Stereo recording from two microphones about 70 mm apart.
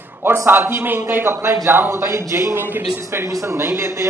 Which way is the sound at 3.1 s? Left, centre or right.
Right.